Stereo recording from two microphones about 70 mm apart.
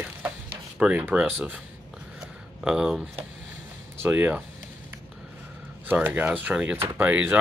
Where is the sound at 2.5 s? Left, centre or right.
Centre.